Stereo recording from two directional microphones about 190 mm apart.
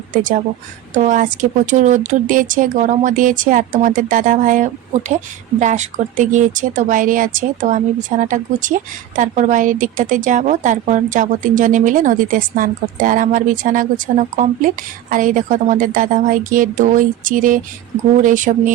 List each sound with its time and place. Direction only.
0.1 s speech: 45° right (ahead or behind)